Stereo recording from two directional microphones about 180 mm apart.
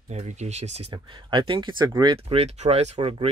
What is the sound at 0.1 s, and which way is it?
Speech, 40° right (ahead or behind).